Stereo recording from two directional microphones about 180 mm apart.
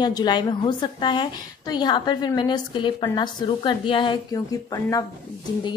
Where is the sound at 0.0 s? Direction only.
25° left (ahead or behind).